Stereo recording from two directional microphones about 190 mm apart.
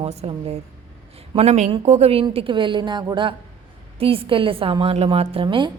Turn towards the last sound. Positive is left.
turn(degrees=-25)  # may be behind; listen again after turning